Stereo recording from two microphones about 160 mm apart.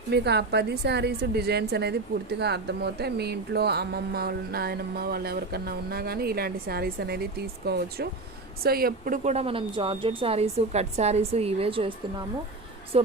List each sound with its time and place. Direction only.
0.1 s a woman's voice: 90° right
8.6 s speech: 70° right (ahead or behind); by 11.9 s 35° right (ahead or behind)